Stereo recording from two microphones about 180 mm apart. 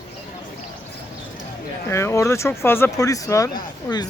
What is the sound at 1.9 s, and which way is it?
Speech, 15° left (ahead or behind).